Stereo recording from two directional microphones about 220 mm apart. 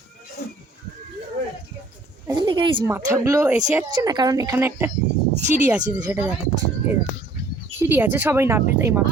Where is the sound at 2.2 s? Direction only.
20° right (ahead or behind).